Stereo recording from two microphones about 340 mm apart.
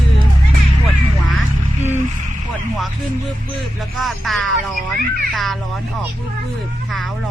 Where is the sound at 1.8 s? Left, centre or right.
Centre.